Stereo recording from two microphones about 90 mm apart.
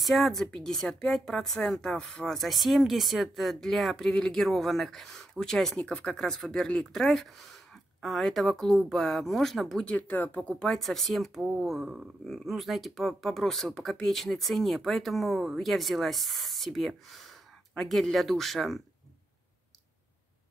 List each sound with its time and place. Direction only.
0.0 s speech: centre (ahead or behind)
9.9 s speech: 20° left (ahead or behind)
10.5 s speech: 5° left (ahead or behind)